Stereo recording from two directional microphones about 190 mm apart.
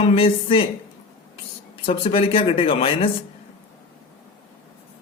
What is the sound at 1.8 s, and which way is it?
Speech, 30° left (ahead or behind).